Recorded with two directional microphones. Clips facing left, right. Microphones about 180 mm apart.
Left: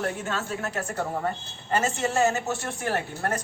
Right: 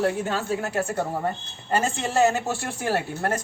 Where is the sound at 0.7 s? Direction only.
30° right (ahead or behind).